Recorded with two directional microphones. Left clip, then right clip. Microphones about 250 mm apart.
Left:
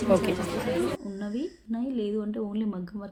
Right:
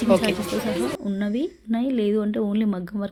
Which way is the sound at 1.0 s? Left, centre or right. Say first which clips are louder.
Right 7 dB; right.